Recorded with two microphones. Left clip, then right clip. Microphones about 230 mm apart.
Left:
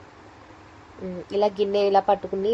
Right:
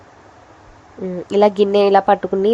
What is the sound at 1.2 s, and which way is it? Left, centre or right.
Speech, right.